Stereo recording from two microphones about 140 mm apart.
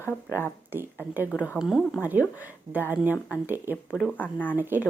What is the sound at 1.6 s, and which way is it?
Speech, centre (ahead or behind).